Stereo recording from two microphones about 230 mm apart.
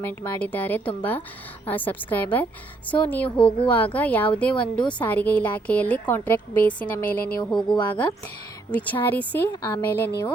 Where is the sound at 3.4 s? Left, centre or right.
Left.